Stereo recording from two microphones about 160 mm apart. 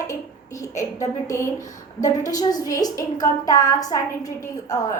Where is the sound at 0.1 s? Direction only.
20° left (ahead or behind).